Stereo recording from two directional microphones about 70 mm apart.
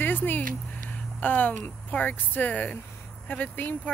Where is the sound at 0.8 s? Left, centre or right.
Left.